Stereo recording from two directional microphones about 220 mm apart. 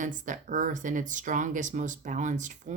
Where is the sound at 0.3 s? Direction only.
35° right (ahead or behind).